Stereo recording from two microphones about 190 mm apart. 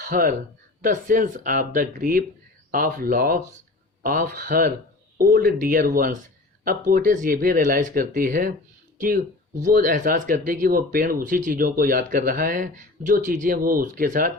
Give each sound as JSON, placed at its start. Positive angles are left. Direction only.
{"t": 0.0, "sound": "speech", "side_deg": -45}